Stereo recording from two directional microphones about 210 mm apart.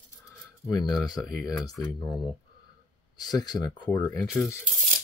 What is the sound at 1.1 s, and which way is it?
Speech, 20° left (ahead or behind).